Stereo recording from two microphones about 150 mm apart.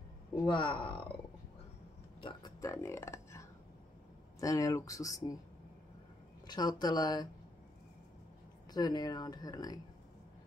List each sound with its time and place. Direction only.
0.5 s speech: 30° left (ahead or behind)
2.2 s speech: 25° left (ahead or behind)
6.4 s speech: 25° left (ahead or behind)
8.7 s speech: 25° left (ahead or behind)